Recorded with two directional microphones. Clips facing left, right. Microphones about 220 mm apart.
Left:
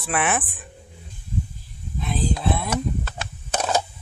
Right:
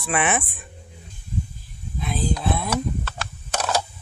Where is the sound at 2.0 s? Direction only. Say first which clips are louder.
Even; centre (ahead or behind).